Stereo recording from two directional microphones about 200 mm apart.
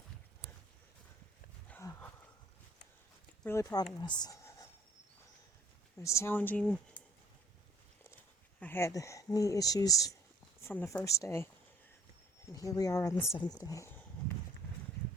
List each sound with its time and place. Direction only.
1.7 s a sound: 10° left (ahead or behind)
3.4 s speech: 15° left (ahead or behind)
6.0 s speech: 15° left (ahead or behind)
8.6 s speech: 10° left (ahead or behind)
12.5 s speech: 15° left (ahead or behind)